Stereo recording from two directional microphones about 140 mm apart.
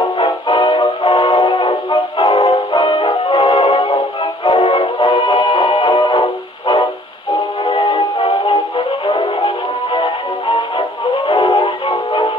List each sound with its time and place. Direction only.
0.2 s music: 30° left (ahead or behind)